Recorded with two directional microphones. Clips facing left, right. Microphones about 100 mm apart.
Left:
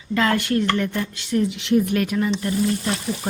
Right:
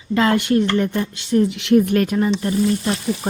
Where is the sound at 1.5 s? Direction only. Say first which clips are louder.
Right 4 dB; 60° right (ahead or behind); by 2.5 s 35° right (ahead or behind).